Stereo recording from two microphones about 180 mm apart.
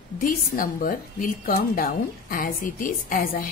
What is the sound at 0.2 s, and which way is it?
A woman's voice, 50° left (ahead or behind).